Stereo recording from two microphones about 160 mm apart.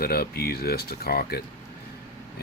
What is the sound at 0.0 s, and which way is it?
Speech, 70° left (ahead or behind).